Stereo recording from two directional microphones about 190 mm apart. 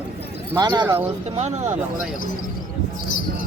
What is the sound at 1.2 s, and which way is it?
Speech, 35° right (ahead or behind).